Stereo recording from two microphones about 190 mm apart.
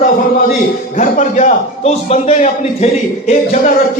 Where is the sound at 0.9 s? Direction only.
40° left (ahead or behind).